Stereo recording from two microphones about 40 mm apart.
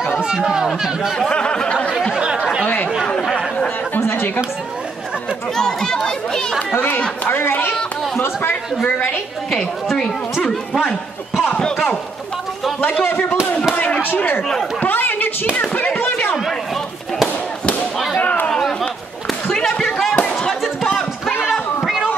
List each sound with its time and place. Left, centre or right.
1.3 s a sound: left
2.1 s chatter: right
2.6 s chatter: left
3.2 s chatter: centre
4.0 s chatter: left
5.6 s speech: centre
8.2 s speech: left
13.0 s speech: left
15.8 s a sound: left
18.1 s a sound: left
18.5 s chatter: centre
19.8 s chop: centre